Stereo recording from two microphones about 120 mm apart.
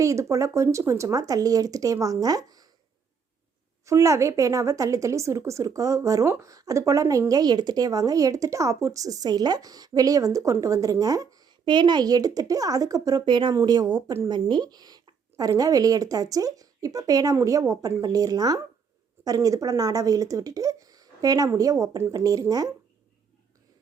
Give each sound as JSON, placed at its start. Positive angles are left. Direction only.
{"t": 0.0, "sound": "speech", "side_deg": -25}
{"t": 3.8, "sound": "speech", "side_deg": -25}
{"t": 13.2, "sound": "speech", "side_deg": -40}